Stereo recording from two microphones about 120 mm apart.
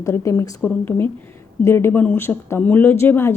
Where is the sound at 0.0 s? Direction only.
25° left (ahead or behind).